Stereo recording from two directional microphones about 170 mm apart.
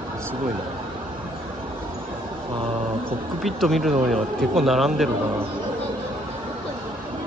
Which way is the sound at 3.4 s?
Centre (ahead or behind).